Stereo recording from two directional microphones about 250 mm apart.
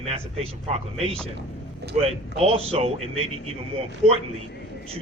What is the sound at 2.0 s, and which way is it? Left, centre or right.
A man's voice, right.